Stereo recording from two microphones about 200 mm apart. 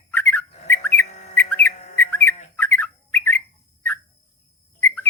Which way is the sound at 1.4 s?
10° left (ahead or behind).